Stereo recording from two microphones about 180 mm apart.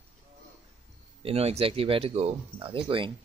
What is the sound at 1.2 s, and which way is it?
Speech, 35° right (ahead or behind).